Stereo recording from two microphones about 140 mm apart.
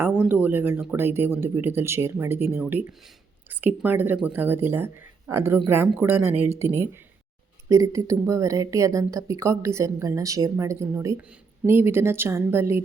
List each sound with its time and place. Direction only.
0.2 s speech: 15° right (ahead or behind)
7.7 s speech: 20° right (ahead or behind)